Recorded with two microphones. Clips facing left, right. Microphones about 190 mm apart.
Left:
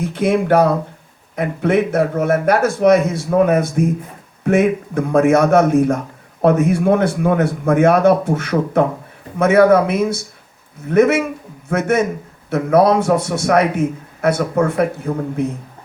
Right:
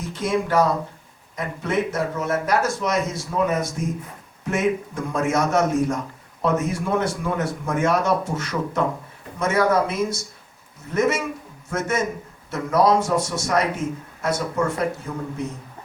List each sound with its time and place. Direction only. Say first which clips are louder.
0.0 s a man's voice: left 7 dB; 60° left (ahead or behind)